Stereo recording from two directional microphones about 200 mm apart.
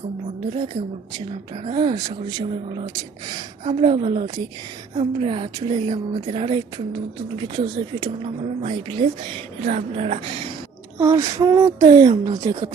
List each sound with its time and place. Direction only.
0.5 s speech: 25° right (ahead or behind)
11.0 s speech: 15° right (ahead or behind)